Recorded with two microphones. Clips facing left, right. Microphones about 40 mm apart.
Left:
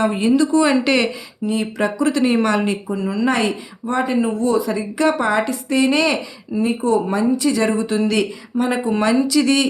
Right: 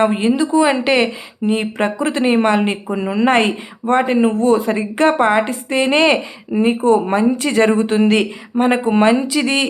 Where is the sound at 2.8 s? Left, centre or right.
Right.